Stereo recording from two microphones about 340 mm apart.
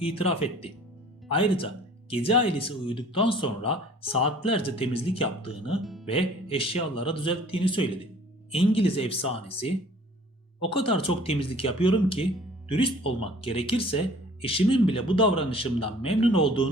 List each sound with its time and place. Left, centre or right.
0.1 s speech: centre
2.0 s speech: centre